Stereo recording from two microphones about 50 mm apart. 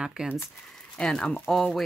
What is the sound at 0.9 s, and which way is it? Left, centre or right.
Speech, centre.